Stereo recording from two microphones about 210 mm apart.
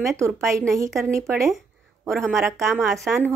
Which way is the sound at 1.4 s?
Centre (ahead or behind).